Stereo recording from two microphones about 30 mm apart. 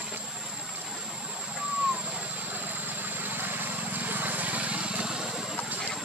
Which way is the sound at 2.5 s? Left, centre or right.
Right.